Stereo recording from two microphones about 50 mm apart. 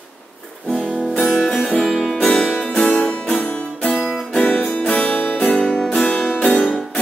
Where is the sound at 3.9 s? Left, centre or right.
Centre.